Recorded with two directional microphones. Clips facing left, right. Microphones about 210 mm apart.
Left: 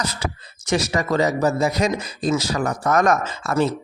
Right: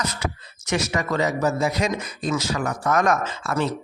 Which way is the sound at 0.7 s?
35° left (ahead or behind).